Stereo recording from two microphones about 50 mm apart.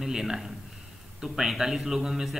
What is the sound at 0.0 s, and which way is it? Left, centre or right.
A man's voice, centre.